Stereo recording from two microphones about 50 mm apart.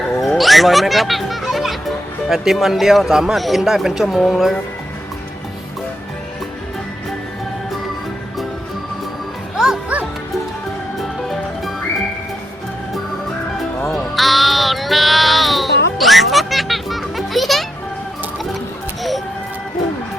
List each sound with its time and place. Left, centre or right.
0.2 s music: centre
2.3 s a man's voice: centre
9.9 s music: right
13.8 s music: centre